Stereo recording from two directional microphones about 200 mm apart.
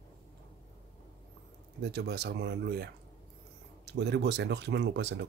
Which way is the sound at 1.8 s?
55° right (ahead or behind).